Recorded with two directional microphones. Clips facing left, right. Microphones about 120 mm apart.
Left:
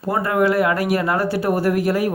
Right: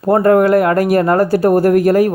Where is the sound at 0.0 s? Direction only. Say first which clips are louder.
Right 8 dB; 50° right (ahead or behind).